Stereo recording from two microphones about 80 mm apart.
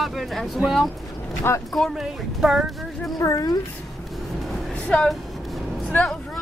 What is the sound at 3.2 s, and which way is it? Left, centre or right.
Speech, left.